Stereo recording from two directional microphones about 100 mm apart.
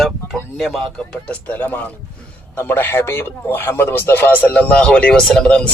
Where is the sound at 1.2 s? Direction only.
15° left (ahead or behind).